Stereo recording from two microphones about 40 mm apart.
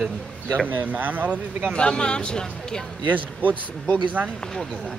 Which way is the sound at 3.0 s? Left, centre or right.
Right.